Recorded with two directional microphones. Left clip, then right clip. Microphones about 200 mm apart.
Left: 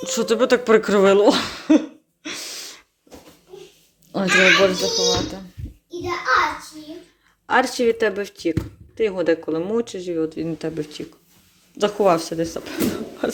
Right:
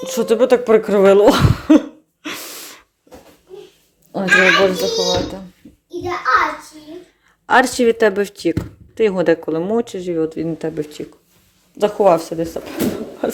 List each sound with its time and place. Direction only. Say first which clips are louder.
0.0 s cough: right 4 dB; centre (ahead or behind)
4.1 s speech: right 3 dB; centre (ahead or behind)
7.4 s speech: right 5 dB; 20° right (ahead or behind); by 13.3 s 5° right (ahead or behind)